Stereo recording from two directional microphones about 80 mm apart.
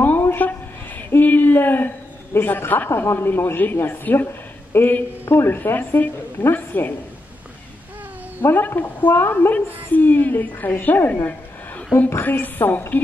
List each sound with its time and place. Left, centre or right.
0.0 s a sound: left
2.3 s a man's voice: left
8.4 s a man's voice: left
12.2 s a man's voice: left